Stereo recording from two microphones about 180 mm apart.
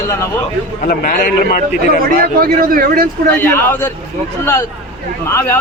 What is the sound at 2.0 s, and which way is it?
A man's voice, 55° right (ahead or behind).